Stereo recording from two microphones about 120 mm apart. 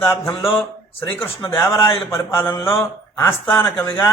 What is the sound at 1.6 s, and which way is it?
Speech, 25° left (ahead or behind).